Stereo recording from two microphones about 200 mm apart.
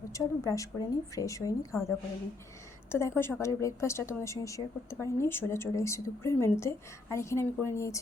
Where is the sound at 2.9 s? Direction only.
10° left (ahead or behind).